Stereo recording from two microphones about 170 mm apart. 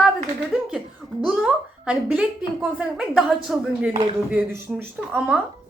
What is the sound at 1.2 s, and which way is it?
Speech, 5° right (ahead or behind).